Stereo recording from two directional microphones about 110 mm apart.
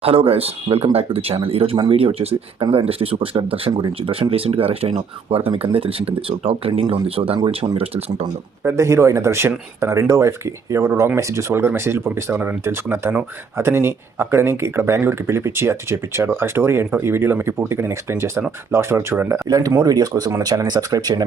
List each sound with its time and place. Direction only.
0.0 s speech: 60° right (ahead or behind)
8.6 s speech: 25° right (ahead or behind)
19.5 s speech: 35° right (ahead or behind)